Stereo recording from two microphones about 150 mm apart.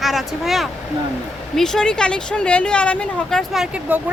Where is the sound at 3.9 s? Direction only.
10° right (ahead or behind).